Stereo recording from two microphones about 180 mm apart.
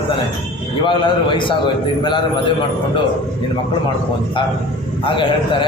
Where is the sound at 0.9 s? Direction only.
25° left (ahead or behind).